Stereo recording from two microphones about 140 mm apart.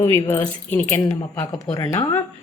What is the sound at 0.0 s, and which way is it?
Speech, 15° left (ahead or behind).